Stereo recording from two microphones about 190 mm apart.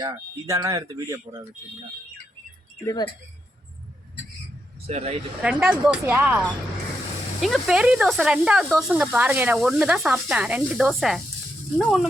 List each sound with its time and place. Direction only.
0.0 s speech: 20° right (ahead or behind)
2.8 s speech: 20° left (ahead or behind)
4.9 s speech: 35° right (ahead or behind)
5.4 s speech: 5° right (ahead or behind)
7.4 s speech: centre (ahead or behind)